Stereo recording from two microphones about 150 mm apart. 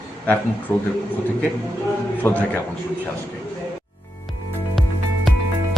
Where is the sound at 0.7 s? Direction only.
10° left (ahead or behind).